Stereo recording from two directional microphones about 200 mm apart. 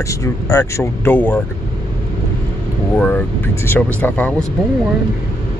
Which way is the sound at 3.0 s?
10° left (ahead or behind).